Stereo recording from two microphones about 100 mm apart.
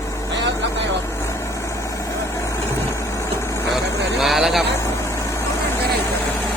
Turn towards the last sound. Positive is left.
turn(degrees=-5)  # may be behind; listen again after turning